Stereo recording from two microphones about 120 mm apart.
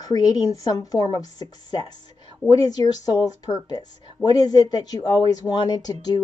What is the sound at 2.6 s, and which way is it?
Speech, 30° left (ahead or behind).